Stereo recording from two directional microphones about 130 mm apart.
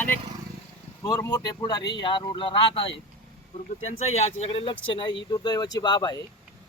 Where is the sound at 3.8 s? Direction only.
55° left (ahead or behind); by 6.2 s 30° left (ahead or behind).